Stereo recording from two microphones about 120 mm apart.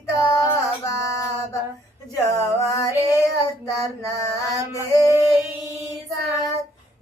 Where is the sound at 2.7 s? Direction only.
30° left (ahead or behind).